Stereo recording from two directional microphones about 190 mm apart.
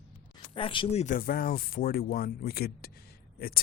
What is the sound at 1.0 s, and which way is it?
Speech, 45° left (ahead or behind).